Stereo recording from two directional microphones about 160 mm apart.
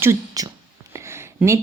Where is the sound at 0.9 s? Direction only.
15° right (ahead or behind).